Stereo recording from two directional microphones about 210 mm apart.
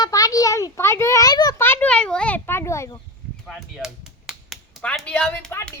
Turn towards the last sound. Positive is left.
turn(degrees=10)  # may be behind; listen again after turning